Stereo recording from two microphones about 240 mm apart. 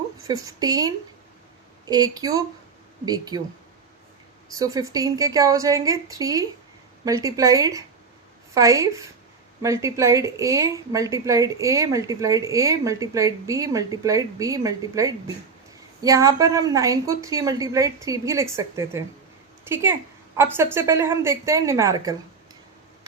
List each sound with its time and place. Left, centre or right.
0.3 s a woman's voice: centre
4.5 s a woman's voice: centre